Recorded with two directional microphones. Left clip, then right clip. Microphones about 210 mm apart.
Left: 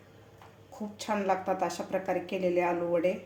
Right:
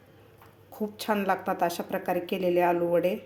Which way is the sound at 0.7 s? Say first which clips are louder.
Right 4 dB; 40° right (ahead or behind).